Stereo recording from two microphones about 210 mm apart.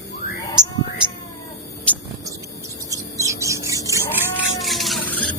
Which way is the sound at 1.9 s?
5° left (ahead or behind).